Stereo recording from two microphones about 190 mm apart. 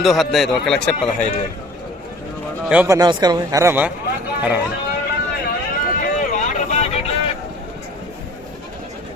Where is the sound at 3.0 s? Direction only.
20° right (ahead or behind).